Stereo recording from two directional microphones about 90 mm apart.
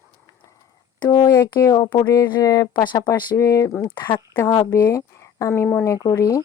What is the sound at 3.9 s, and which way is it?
Speech, 60° left (ahead or behind).